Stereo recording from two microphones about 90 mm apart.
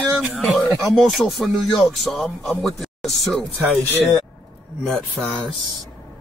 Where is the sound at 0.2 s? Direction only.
10° right (ahead or behind).